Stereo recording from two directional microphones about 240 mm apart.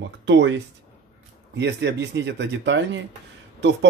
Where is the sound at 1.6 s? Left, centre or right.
Right.